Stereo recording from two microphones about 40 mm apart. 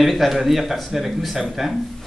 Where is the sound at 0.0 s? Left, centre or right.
Centre.